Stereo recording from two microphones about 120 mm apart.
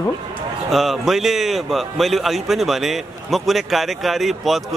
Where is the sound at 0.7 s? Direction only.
Centre (ahead or behind).